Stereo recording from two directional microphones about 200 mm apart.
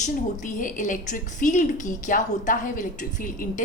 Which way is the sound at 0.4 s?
40° left (ahead or behind).